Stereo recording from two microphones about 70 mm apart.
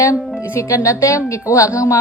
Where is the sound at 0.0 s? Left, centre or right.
Left.